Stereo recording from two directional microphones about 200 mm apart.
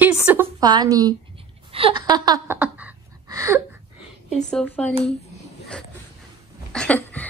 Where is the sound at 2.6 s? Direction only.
10° right (ahead or behind).